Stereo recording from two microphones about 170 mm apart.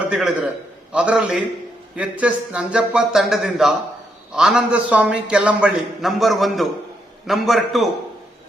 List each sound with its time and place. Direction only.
0.1 s a man's voice: 5° right (ahead or behind)